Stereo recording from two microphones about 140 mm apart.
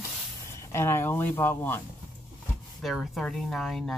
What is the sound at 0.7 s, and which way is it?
Speech, 15° left (ahead or behind).